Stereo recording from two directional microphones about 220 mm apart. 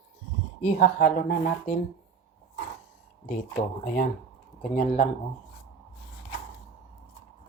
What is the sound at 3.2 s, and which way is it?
Speech, 40° left (ahead or behind).